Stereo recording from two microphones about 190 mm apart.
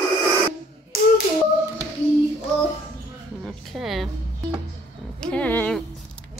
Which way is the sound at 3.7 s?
Centre (ahead or behind).